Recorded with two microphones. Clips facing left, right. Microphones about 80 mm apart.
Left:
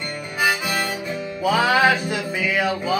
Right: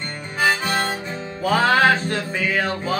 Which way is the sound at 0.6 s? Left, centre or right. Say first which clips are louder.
Right 2 dB; right.